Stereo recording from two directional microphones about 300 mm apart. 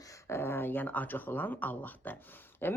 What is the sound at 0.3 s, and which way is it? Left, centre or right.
Speech, centre.